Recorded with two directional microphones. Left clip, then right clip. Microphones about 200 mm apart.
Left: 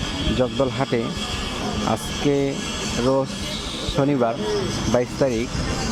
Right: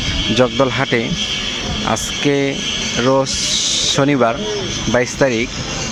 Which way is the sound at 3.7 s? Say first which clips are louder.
Right 5 dB; 5° right (ahead or behind).